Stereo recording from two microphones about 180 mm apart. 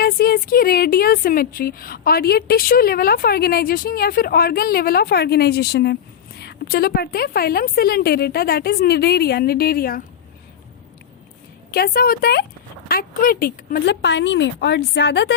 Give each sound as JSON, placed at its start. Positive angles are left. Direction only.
{"t": 0.0, "sound": "speech", "side_deg": 55}
{"t": 11.7, "sound": "speech", "side_deg": 55}